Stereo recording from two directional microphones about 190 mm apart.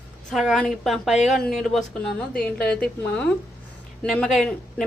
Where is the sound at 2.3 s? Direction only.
50° left (ahead or behind).